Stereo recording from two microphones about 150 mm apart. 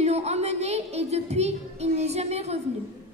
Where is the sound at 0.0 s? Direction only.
45° right (ahead or behind).